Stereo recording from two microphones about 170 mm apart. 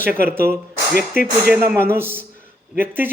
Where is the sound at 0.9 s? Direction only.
55° left (ahead or behind).